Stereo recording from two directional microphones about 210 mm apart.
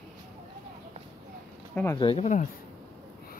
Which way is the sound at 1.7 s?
10° left (ahead or behind).